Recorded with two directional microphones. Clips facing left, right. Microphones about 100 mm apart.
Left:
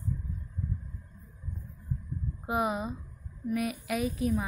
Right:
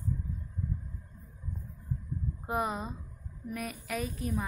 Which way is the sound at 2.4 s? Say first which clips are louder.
Left 3 dB; 5° left (ahead or behind).